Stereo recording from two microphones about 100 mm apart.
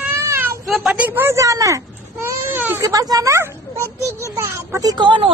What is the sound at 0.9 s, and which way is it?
Speech, 20° right (ahead or behind).